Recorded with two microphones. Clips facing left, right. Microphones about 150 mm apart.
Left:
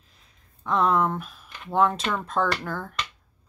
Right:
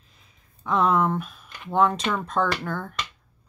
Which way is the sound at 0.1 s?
Centre (ahead or behind).